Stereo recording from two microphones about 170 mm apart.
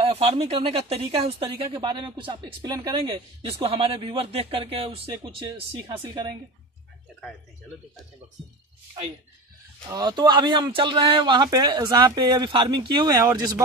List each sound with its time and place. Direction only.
0.0 s a woman's voice: 35° right (ahead or behind)
9.8 s speech: 25° right (ahead or behind)